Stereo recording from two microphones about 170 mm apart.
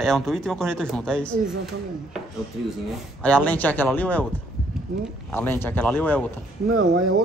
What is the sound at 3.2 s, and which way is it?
Speech, 5° left (ahead or behind).